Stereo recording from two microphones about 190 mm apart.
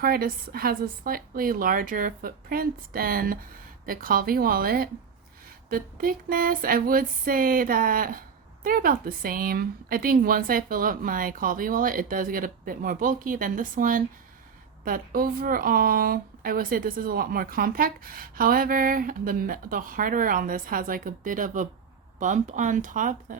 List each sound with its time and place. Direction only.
0.0 s speech: 50° right (ahead or behind)